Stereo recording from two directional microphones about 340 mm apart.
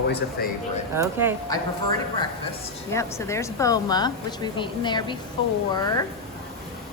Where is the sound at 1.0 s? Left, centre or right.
Centre.